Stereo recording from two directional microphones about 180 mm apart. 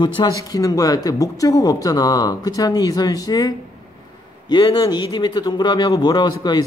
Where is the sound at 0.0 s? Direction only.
25° left (ahead or behind).